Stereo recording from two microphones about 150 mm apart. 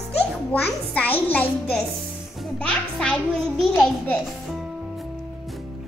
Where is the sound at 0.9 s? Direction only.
10° left (ahead or behind).